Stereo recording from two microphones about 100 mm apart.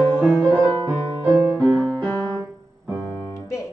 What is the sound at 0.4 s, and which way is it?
Music, 30° right (ahead or behind).